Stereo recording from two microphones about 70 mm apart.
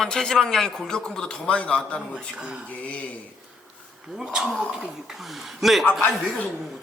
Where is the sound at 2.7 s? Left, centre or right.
Left.